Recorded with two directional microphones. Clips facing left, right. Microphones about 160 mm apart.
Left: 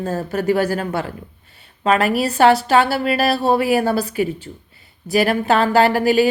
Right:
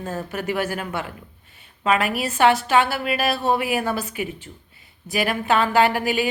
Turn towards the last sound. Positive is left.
turn(degrees=35)  # may be behind; listen again after turning